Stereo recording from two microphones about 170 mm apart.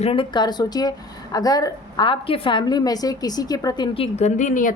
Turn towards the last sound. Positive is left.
turn(degrees=50)  # may be behind; listen again after turning